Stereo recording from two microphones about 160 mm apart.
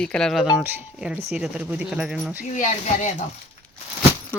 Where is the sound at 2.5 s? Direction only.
50° left (ahead or behind).